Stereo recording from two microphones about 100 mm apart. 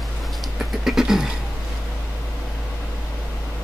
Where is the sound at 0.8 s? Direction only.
5° right (ahead or behind).